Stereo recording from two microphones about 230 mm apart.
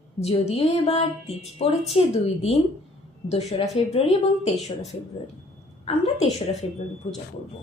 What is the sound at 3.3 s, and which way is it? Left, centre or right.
Speech, left.